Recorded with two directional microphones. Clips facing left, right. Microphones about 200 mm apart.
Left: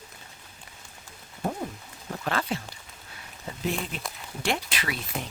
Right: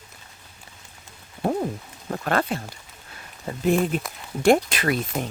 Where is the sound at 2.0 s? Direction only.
50° right (ahead or behind).